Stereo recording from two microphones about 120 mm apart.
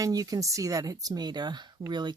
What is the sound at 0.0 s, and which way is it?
Speech, 30° right (ahead or behind).